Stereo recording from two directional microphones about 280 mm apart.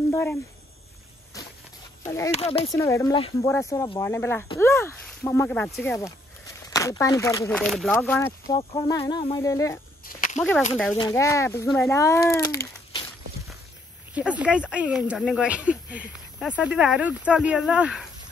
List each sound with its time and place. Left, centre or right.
0.1 s speech: centre
2.3 s speech: left
10.0 s a sound: left
10.7 s speech: centre
14.1 s speech: centre